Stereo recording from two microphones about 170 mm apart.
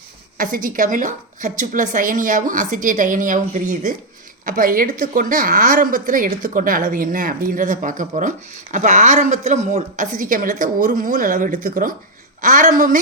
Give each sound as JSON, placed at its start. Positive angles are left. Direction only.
{"t": 0.3, "sound": "a woman's voice", "side_deg": -55}